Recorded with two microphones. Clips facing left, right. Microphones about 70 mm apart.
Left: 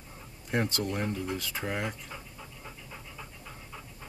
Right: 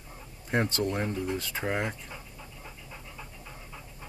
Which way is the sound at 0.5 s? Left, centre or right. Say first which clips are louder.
Right 2 dB; right.